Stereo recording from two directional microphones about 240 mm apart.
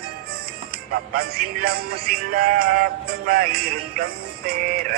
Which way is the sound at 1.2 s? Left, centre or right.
Right.